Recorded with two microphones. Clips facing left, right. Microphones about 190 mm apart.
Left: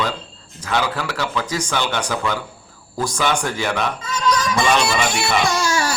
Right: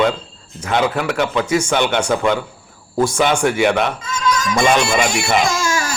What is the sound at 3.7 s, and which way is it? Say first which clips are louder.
Speech: right 5 dB; 20° right (ahead or behind).